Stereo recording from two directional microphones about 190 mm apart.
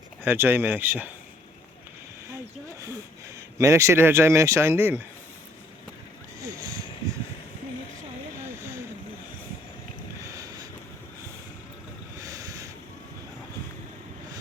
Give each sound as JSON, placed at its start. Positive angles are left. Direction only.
{"t": 0.2, "sound": "speech", "side_deg": -10}
{"t": 3.6, "sound": "speech", "side_deg": -15}
{"t": 8.4, "sound": "vehicle", "side_deg": -15}
{"t": 10.2, "sound": "boat", "side_deg": -15}
{"t": 12.2, "sound": "boat", "side_deg": -20}